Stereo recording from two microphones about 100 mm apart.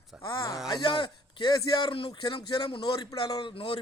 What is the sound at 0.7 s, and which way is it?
Speech, 45° left (ahead or behind).